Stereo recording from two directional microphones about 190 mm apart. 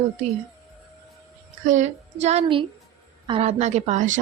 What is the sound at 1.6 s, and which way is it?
A woman's voice, 40° right (ahead or behind).